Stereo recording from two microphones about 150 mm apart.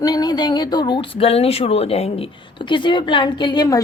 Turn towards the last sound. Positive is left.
turn(degrees=25)  # may be behind; listen again after turning